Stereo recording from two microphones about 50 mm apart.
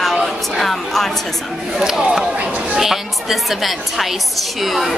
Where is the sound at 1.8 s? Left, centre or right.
Centre.